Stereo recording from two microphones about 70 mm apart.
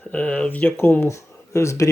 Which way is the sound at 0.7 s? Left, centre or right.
Left.